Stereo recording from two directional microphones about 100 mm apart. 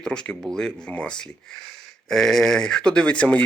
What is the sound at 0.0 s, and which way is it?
Speech, 10° left (ahead or behind).